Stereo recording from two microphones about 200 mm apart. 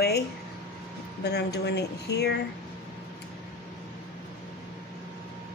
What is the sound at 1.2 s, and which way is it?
Speech, 55° left (ahead or behind).